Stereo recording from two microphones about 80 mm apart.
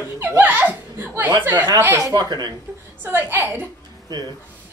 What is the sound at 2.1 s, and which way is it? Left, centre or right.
Laughter, right.